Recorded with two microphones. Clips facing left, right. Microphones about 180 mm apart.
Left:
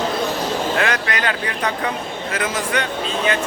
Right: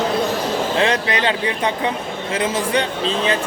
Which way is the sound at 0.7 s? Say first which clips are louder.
Right 3 dB; 25° right (ahead or behind).